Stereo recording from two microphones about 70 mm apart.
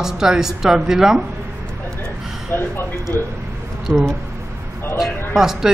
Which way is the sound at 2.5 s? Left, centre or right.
Left.